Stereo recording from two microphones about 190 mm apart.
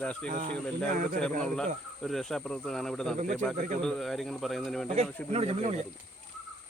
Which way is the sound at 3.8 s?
Centre (ahead or behind).